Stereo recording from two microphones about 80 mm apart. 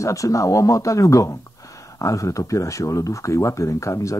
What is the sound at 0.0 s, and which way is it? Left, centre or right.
Speech, left.